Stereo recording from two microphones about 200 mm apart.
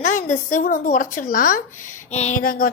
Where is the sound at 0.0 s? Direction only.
40° left (ahead or behind).